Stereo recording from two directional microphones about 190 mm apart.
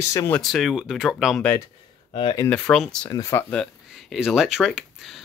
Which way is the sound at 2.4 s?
5° left (ahead or behind).